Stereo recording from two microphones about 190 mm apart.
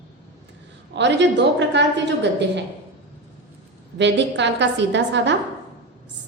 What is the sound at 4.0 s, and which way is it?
A woman's voice, 65° right (ahead or behind).